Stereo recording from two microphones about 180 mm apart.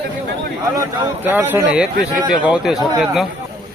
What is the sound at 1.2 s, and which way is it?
A man's voice, 10° right (ahead or behind).